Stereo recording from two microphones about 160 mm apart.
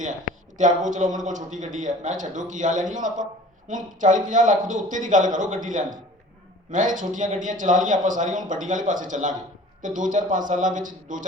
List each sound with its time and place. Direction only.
0.5 s speech: 50° right (ahead or behind)